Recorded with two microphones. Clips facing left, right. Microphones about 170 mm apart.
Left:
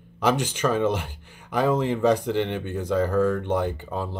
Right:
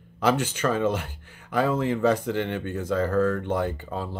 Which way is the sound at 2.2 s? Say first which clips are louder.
Left 2 dB; 20° left (ahead or behind).